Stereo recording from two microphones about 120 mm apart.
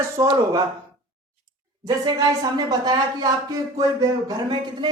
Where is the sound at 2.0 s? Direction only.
35° right (ahead or behind).